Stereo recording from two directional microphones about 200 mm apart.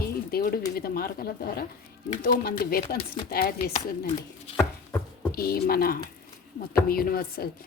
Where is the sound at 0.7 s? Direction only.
50° left (ahead or behind).